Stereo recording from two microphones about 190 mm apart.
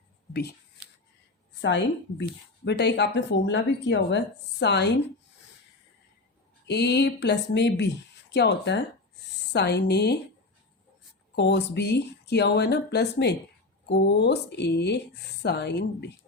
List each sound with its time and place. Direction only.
1.6 s speech: 70° left (ahead or behind)
6.7 s speech: 65° left (ahead or behind)
11.3 s speech: 65° left (ahead or behind)